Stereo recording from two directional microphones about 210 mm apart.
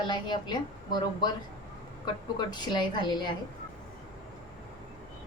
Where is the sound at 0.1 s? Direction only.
20° left (ahead or behind).